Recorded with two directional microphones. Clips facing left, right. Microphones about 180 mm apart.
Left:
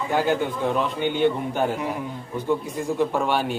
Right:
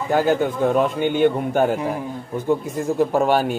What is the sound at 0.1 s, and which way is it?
A man's voice, 45° right (ahead or behind).